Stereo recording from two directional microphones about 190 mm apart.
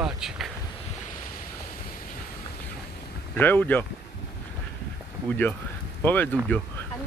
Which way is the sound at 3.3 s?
10° left (ahead or behind).